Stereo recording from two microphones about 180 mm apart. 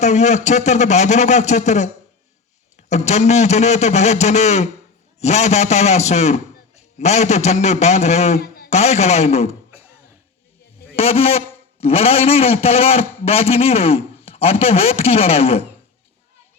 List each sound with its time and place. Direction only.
0.0 s a man's voice: 40° left (ahead or behind)
2.9 s a man's voice: 40° left (ahead or behind)
8.4 s a sound: 60° left (ahead or behind)
8.7 s a man's voice: 35° left (ahead or behind)
10.9 s a man's voice: 35° left (ahead or behind)